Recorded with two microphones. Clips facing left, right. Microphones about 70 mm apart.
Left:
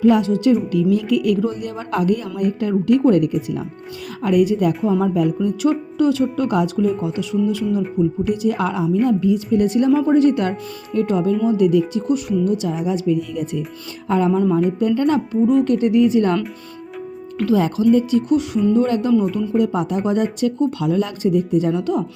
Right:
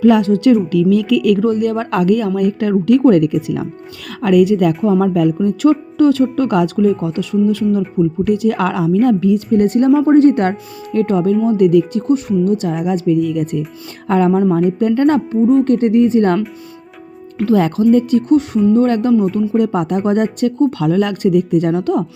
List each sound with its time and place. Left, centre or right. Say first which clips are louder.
0.0 s a woman's voice: right 4 dB; right
0.7 s speech: right 4 dB; right
4.2 s a woman's voice: right 5 dB; right
17.4 s speech: right 3 dB; right